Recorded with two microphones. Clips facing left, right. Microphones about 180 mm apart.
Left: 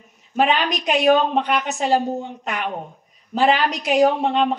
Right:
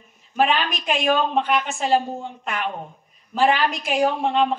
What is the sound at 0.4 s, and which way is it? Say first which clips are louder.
A woman's voice: left 2 dB; 20° left (ahead or behind).